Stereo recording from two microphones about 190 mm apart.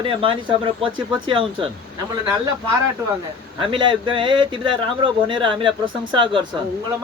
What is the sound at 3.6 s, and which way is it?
Speech, 25° right (ahead or behind).